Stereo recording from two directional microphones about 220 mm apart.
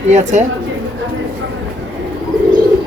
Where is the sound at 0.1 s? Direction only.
30° right (ahead or behind).